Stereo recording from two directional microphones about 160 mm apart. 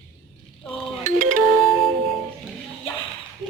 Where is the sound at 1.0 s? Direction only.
55° right (ahead or behind).